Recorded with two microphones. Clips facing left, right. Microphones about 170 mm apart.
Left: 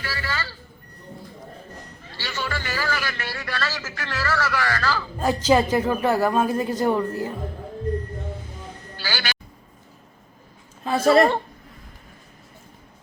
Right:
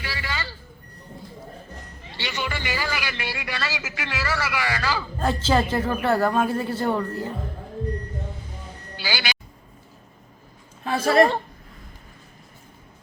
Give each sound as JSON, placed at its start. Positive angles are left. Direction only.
{"t": 0.0, "sound": "vehicle", "side_deg": -15}
{"t": 2.0, "sound": "a man's voice", "side_deg": -20}
{"t": 5.2, "sound": "speech", "side_deg": 15}
{"t": 9.0, "sound": "music", "side_deg": -15}
{"t": 10.8, "sound": "a sound", "side_deg": 25}